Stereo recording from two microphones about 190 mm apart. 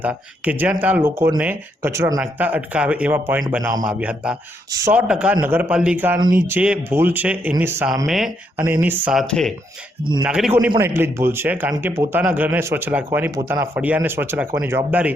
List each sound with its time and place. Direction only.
0.0 s speech: 10° right (ahead or behind)
3.8 s a man's voice: 5° right (ahead or behind)
8.0 s a man's voice: centre (ahead or behind)
8.5 s speech: 10° right (ahead or behind)
9.2 s a man's voice: 5° left (ahead or behind)